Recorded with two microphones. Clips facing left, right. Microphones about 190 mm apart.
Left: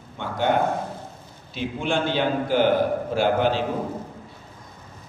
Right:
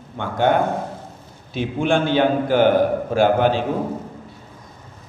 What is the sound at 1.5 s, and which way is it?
A man's voice, 55° right (ahead or behind).